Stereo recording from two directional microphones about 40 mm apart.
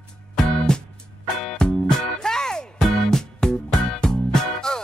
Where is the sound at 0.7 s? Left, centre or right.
Centre.